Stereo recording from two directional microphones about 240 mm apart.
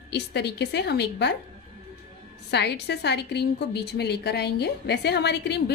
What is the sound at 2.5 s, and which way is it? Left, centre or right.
A woman's voice, left.